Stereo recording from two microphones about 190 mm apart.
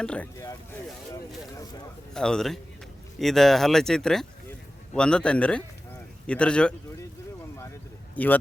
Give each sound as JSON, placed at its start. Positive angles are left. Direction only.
{"t": 0.0, "sound": "speech", "side_deg": 5}
{"t": 0.3, "sound": "vehicle", "side_deg": 15}
{"t": 2.1, "sound": "speech", "side_deg": 5}
{"t": 8.1, "sound": "speech", "side_deg": 10}